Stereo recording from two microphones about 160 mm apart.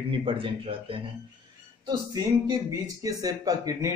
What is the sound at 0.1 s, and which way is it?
Speech, 35° right (ahead or behind).